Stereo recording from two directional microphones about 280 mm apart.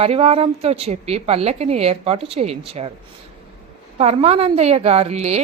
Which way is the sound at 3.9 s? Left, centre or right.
Right.